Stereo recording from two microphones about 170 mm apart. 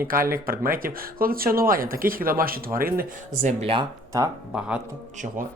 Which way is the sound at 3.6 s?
35° right (ahead or behind).